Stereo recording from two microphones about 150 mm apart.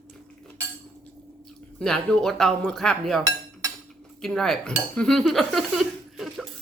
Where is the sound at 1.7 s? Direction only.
5° left (ahead or behind).